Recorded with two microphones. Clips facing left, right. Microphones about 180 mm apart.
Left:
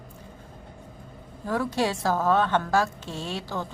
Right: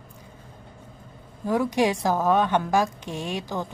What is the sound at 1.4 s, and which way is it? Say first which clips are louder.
A woman's voice: right 4 dB; 15° right (ahead or behind).